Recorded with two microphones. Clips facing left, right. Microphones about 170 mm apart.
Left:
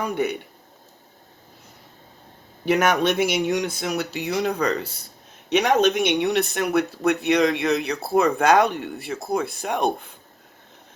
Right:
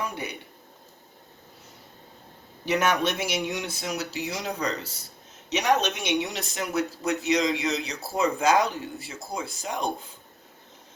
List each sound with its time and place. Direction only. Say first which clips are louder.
0.0 s speech: left 9 dB; 60° left (ahead or behind)
2.6 s speech: left 5 dB; 50° left (ahead or behind)